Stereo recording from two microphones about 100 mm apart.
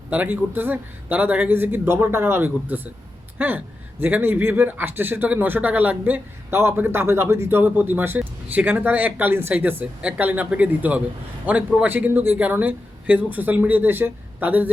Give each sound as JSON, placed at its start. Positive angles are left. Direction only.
{"t": 0.1, "sound": "a man's voice", "side_deg": -15}